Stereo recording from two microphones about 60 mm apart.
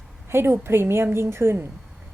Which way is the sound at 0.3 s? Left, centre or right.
Right.